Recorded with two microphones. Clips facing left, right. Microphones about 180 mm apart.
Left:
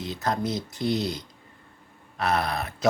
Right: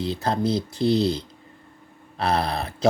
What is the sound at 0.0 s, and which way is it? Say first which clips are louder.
Speech: right 4 dB; 30° right (ahead or behind).